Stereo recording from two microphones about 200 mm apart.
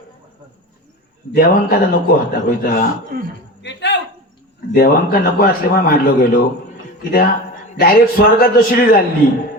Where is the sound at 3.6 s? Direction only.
60° left (ahead or behind).